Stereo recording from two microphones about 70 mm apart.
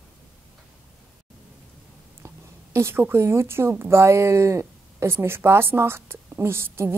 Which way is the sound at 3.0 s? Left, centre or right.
Right.